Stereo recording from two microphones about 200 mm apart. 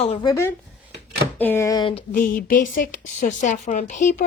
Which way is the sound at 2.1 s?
45° left (ahead or behind).